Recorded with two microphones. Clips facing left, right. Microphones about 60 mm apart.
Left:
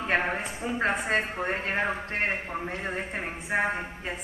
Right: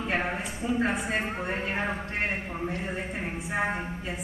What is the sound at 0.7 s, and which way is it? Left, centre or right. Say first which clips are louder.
Speech: left 3 dB; left.